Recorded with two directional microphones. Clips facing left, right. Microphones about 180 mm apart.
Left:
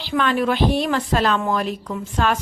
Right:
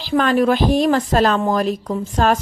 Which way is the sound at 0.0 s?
40° right (ahead or behind).